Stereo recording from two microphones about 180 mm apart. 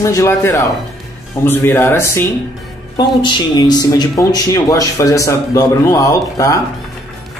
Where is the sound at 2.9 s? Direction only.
25° left (ahead or behind).